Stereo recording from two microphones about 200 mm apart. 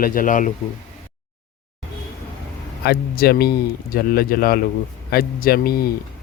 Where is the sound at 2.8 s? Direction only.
50° left (ahead or behind).